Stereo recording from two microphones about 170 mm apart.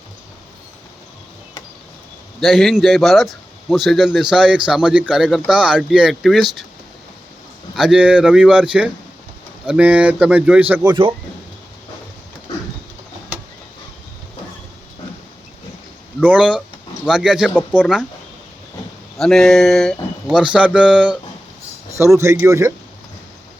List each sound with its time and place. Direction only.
2.4 s a man's voice: centre (ahead or behind)
7.8 s a man's voice: 5° right (ahead or behind)
10.8 s speech: 30° right (ahead or behind)
16.2 s a man's voice: 5° right (ahead or behind)
19.2 s a man's voice: centre (ahead or behind)
22.2 s speech: 15° right (ahead or behind)